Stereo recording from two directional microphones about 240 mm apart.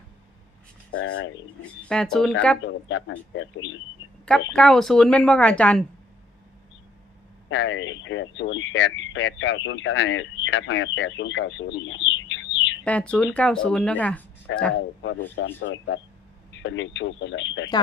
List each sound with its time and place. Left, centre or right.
0.9 s speech: left
1.8 s a woman's voice: centre
2.6 s speech: left
4.3 s a woman's voice: centre
7.5 s speech: left
12.8 s a woman's voice: centre
14.5 s speech: left